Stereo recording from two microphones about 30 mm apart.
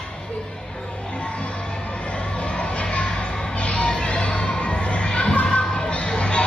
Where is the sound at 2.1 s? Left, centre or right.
Left.